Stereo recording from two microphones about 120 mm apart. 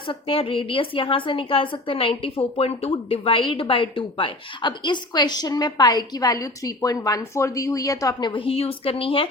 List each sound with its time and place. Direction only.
0.1 s a woman's voice: 50° left (ahead or behind); by 8.3 s 30° left (ahead or behind)
8.3 s a woman's voice: 50° left (ahead or behind)